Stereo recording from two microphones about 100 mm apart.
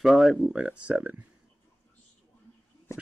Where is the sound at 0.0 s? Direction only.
5° right (ahead or behind).